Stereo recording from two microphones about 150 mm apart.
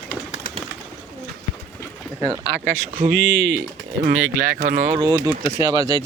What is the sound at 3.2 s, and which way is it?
Speech, 90° right.